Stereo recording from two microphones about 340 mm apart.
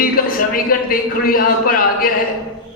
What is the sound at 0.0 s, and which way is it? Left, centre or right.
A man's voice, left.